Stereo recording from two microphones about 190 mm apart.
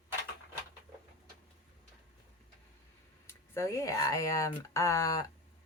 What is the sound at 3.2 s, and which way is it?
Speech, 15° left (ahead or behind).